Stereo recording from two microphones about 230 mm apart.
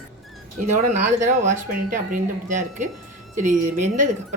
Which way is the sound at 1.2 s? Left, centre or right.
Right.